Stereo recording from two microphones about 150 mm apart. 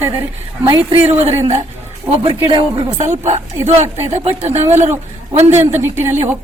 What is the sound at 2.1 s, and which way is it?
Speech, 35° right (ahead or behind).